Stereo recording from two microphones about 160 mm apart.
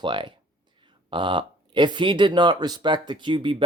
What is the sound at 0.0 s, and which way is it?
Speech, 30° right (ahead or behind).